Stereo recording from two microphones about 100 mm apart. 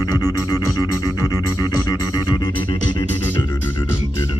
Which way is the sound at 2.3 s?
45° left (ahead or behind).